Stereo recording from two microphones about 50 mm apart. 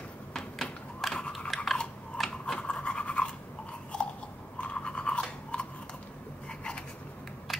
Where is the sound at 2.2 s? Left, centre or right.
Centre.